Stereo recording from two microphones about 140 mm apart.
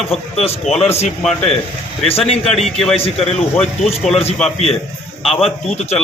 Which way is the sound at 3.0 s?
45° left (ahead or behind).